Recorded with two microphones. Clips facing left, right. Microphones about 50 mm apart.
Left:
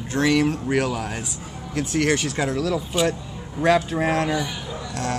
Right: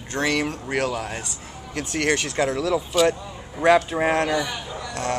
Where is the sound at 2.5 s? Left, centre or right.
Right.